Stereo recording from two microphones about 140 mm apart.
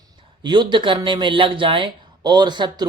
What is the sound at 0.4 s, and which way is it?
Speech, 35° right (ahead or behind).